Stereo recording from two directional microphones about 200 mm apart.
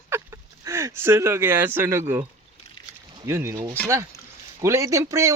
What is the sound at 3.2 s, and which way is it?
Speech, 15° right (ahead or behind).